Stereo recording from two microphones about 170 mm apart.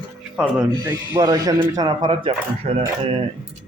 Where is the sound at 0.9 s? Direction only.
20° right (ahead or behind).